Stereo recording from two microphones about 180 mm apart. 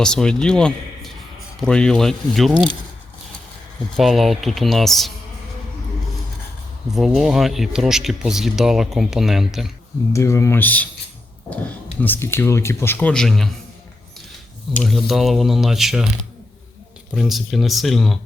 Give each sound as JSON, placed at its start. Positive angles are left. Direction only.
{"t": 0.0, "sound": "a man's voice", "side_deg": 5}
{"t": 3.9, "sound": "speech", "side_deg": 0}
{"t": 6.9, "sound": "speech", "side_deg": 0}
{"t": 10.1, "sound": "speech", "side_deg": 15}
{"t": 14.8, "sound": "speech", "side_deg": 0}
{"t": 17.1, "sound": "speech", "side_deg": 0}